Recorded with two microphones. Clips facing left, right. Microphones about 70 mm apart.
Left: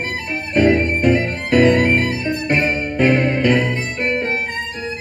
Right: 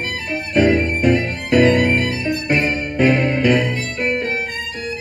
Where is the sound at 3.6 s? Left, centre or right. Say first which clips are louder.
Even; left.